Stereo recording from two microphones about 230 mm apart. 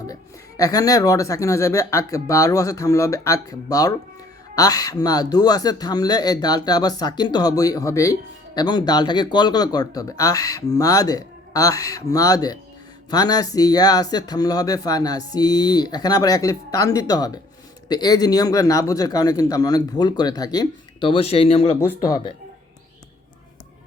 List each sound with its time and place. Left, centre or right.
0.1 s speech: centre